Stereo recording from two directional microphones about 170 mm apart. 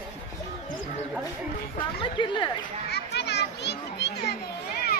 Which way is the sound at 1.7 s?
30° left (ahead or behind).